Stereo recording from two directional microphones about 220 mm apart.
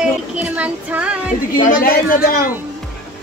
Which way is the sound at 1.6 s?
40° left (ahead or behind).